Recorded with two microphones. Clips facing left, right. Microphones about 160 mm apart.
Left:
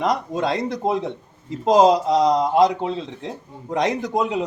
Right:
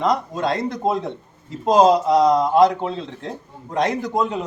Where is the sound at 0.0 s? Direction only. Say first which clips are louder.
Right 1 dB; 20° left (ahead or behind).